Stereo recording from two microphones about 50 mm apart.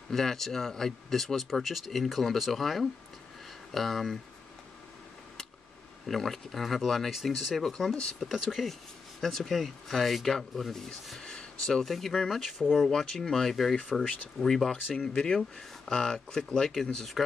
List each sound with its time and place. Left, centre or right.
0.1 s speech: centre
6.0 s speech: centre
13.7 s speech: centre